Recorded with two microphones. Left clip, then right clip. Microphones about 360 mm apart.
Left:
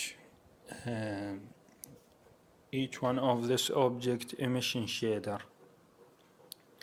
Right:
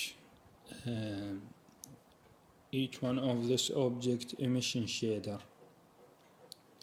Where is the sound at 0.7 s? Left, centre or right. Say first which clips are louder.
Left 4 dB; centre.